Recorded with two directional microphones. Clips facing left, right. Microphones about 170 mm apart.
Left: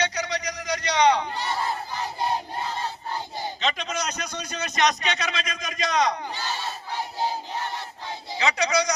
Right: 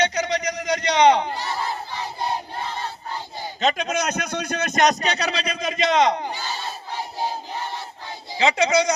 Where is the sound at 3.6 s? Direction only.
50° right (ahead or behind); by 6.3 s 25° right (ahead or behind).